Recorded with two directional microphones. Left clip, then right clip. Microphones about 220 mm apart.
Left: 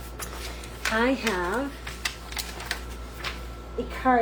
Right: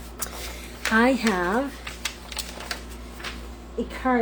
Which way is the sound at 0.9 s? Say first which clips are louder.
Right 4 dB; 50° right (ahead or behind).